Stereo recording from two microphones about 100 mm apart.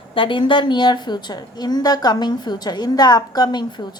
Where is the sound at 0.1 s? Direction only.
55° left (ahead or behind).